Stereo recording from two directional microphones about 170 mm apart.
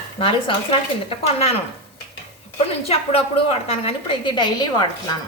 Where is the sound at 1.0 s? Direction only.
35° left (ahead or behind).